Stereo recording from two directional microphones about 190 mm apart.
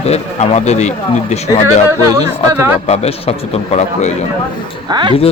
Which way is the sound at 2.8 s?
35° left (ahead or behind).